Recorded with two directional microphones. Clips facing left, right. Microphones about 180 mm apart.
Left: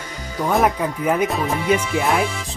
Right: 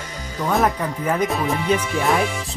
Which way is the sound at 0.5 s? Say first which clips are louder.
Left 1 dB; 10° left (ahead or behind).